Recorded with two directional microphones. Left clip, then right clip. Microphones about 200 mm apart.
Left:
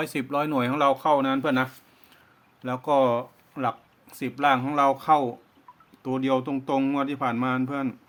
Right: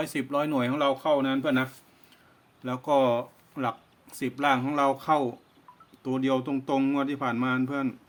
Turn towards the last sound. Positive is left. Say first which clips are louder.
# left 1 dB
turn(degrees=20)  # may be behind; listen again after turning